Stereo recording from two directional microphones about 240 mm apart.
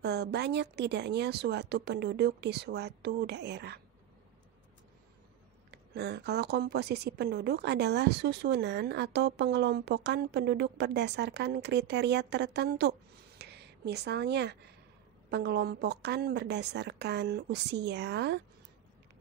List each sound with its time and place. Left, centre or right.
0.0 s speech: right
5.7 s speech: right